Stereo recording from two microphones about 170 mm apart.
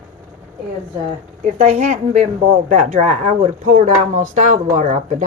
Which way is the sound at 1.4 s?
40° right (ahead or behind).